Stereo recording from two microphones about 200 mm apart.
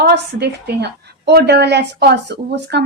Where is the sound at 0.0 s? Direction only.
55° right (ahead or behind).